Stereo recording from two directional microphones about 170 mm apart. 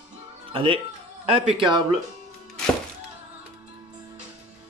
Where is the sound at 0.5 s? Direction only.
30° right (ahead or behind).